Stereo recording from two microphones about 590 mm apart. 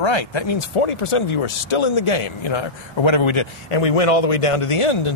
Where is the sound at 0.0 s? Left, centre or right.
Left.